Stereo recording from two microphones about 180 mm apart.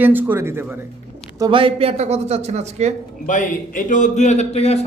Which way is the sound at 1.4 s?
30° right (ahead or behind).